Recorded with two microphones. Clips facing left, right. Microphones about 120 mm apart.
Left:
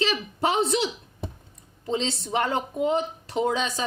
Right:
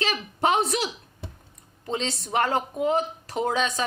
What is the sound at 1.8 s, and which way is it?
A woman's voice, 25° left (ahead or behind).